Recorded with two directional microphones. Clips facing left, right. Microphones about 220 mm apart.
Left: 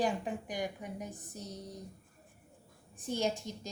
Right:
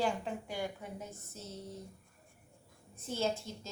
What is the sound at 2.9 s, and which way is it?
Speech, 15° left (ahead or behind).